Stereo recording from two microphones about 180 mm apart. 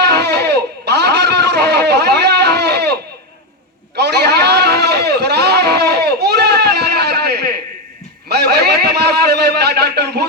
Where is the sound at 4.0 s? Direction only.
65° right (ahead or behind).